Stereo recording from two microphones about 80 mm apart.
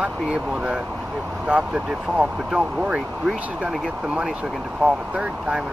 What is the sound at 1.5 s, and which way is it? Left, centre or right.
Speech, centre.